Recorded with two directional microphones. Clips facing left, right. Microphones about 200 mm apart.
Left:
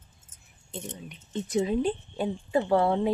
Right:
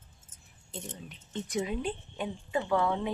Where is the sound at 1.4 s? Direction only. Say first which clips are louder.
Left 7 dB; 30° left (ahead or behind).